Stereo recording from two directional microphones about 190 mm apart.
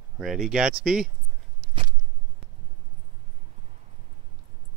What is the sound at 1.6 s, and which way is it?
Biting, 25° right (ahead or behind).